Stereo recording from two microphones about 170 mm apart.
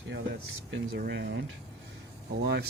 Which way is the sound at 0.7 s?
65° right (ahead or behind).